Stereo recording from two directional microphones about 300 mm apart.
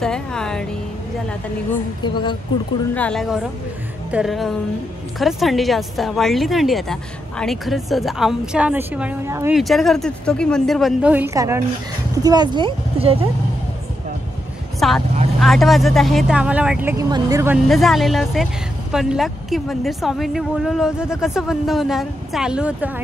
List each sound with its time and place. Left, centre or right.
0.0 s speech: centre
2.0 s speech: centre
2.9 s speech: centre
14.8 s speech: centre